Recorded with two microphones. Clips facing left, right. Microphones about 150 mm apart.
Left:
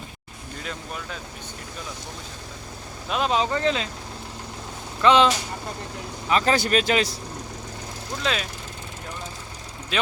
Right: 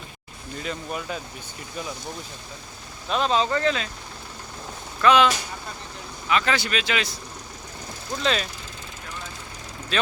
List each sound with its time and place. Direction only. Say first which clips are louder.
0.6 s speech: right 4 dB; 5° right (ahead or behind)
3.1 s speech: right 1 dB; 10° left (ahead or behind)
5.0 s speech: left 1 dB; 30° left (ahead or behind)
8.2 s speech: right 2 dB; 5° left (ahead or behind)
9.9 s speech: even; 15° left (ahead or behind)